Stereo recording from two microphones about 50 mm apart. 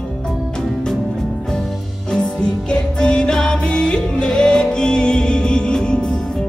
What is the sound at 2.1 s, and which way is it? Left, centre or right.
Music, centre.